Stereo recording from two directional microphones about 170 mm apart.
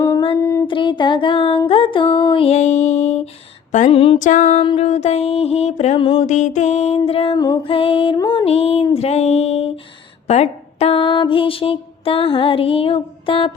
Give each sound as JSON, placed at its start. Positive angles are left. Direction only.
{"t": 0.7, "sound": "music", "side_deg": 30}
{"t": 4.2, "sound": "music", "side_deg": 45}
{"t": 7.3, "sound": "music", "side_deg": 25}
{"t": 8.4, "sound": "music", "side_deg": 35}
{"t": 10.2, "sound": "a sound", "side_deg": 40}